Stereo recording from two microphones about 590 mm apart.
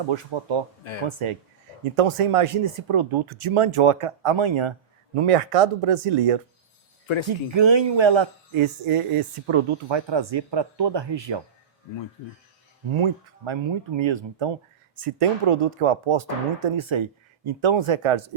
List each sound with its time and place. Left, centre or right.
0.1 s speech: right
5.1 s speech: right
7.5 s speech: right
12.9 s speech: right
14.9 s speech: right